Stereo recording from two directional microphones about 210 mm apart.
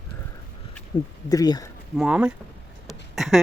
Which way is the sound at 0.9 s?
20° left (ahead or behind).